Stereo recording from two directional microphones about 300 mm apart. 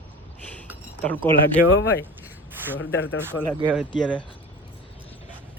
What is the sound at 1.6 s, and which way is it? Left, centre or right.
Speech, left.